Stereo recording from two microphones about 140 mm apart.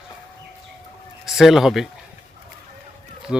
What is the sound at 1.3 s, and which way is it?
Speech, centre (ahead or behind).